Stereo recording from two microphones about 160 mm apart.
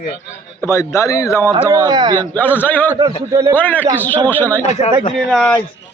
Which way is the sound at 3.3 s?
20° right (ahead or behind).